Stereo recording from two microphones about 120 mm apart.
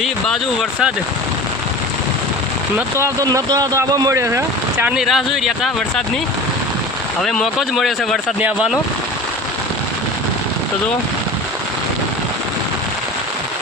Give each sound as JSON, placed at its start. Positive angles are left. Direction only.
{"t": 3.2, "sound": "speech", "side_deg": -30}
{"t": 4.9, "sound": "speech", "side_deg": -5}
{"t": 7.2, "sound": "speech", "side_deg": 5}
{"t": 8.4, "sound": "speech", "side_deg": -10}